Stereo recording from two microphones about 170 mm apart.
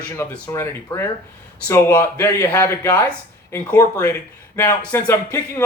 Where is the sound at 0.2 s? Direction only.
10° left (ahead or behind).